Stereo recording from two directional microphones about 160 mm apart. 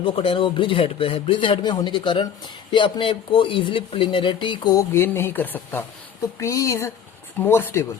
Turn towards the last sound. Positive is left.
turn(degrees=15)  # may be behind; listen again after turning